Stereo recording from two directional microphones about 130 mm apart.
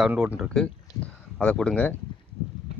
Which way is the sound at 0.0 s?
10° right (ahead or behind).